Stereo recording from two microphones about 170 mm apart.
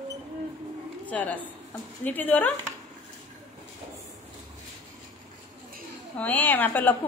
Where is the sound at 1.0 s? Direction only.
10° left (ahead or behind).